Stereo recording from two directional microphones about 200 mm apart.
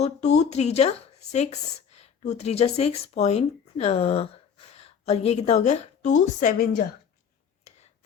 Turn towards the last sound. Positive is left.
turn(degrees=45)  # may be behind; listen again after turning